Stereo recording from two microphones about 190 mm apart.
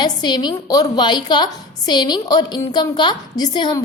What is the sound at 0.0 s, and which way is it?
A woman's voice, 25° left (ahead or behind).